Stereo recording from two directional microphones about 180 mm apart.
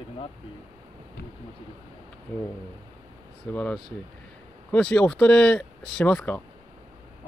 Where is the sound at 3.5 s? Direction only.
10° left (ahead or behind).